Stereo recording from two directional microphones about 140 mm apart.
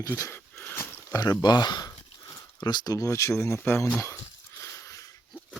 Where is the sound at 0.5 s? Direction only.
10° left (ahead or behind).